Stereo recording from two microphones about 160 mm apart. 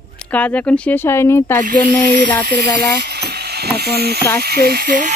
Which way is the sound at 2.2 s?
30° left (ahead or behind).